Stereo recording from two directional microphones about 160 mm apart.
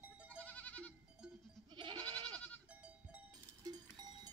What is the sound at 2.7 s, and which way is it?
Cowbell, 10° right (ahead or behind).